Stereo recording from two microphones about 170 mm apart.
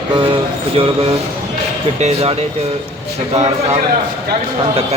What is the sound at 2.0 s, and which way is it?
Speech, 40° right (ahead or behind).